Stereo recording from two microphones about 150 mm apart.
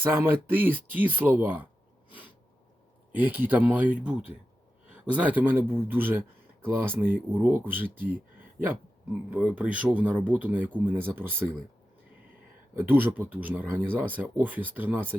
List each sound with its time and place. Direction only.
0.0 s speech: 15° right (ahead or behind)
3.2 s speech: 10° right (ahead or behind)
7.9 s a sound: 70° right (ahead or behind)
9.3 s speech: 10° right (ahead or behind)
12.8 s speech: 15° right (ahead or behind)